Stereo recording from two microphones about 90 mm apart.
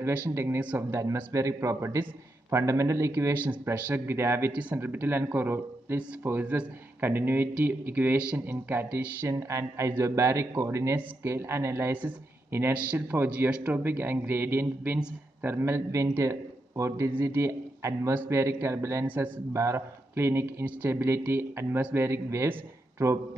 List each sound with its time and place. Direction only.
0.3 s speech: 30° right (ahead or behind)
3.4 s speech: 20° right (ahead or behind)
4.5 s a man's voice: 15° right (ahead or behind); by 19.0 s 30° right (ahead or behind)
19.0 s speech: 20° right (ahead or behind)
19.5 s speech: 30° right (ahead or behind)